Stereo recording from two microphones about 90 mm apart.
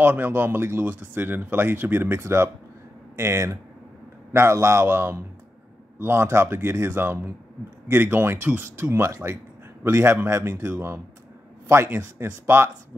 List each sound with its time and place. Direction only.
0.0 s speech: 20° right (ahead or behind)